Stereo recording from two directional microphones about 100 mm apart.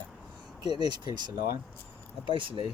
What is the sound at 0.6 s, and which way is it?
Speech, 45° right (ahead or behind).